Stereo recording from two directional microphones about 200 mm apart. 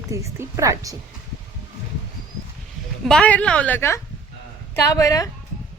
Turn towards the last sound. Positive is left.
turn(degrees=15)  # may be behind; listen again after turning